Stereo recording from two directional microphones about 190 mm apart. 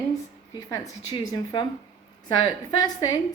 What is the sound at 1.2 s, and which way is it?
Speech, 25° left (ahead or behind).